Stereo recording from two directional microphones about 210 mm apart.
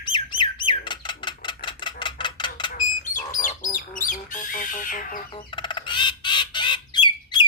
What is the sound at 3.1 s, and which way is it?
Bird, 40° left (ahead or behind).